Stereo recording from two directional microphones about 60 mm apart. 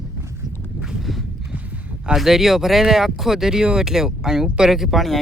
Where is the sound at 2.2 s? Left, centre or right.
Centre.